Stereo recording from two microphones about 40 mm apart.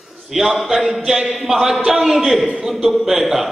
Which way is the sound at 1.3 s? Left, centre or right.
Centre.